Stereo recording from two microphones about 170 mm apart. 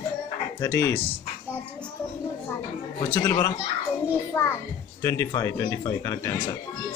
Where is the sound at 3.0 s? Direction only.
15° left (ahead or behind).